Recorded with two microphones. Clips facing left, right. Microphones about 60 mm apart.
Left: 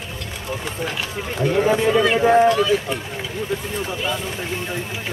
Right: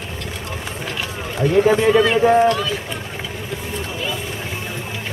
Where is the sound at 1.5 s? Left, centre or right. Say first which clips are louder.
Right 3 dB; centre.